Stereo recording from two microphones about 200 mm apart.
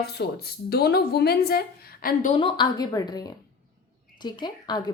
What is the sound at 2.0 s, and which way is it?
Speech, 40° left (ahead or behind).